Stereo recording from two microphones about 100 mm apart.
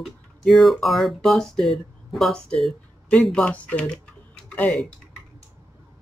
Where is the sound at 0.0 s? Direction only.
Centre (ahead or behind).